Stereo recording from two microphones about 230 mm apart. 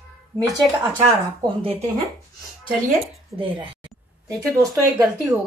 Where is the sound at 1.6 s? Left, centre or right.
Right.